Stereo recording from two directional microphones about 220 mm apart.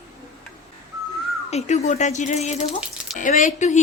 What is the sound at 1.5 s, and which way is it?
A woman's voice, 30° left (ahead or behind).